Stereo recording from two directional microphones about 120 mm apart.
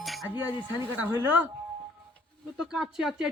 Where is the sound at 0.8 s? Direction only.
20° right (ahead or behind).